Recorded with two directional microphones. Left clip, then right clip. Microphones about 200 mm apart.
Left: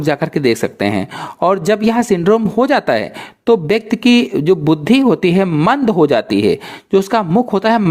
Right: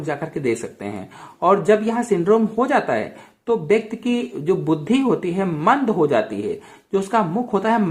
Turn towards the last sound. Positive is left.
turn(degrees=40)  # may be behind; listen again after turning